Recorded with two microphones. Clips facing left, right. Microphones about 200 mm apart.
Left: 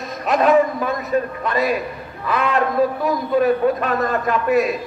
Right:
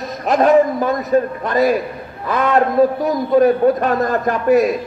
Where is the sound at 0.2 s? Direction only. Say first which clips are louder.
Right 3 dB; 45° right (ahead or behind).